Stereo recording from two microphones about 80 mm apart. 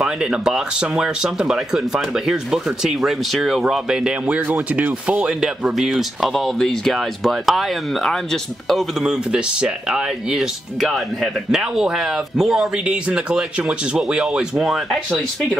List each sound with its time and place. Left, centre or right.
0.0 s speech: centre
4.3 s speech: right
5.8 s speech: centre
9.0 s speech: centre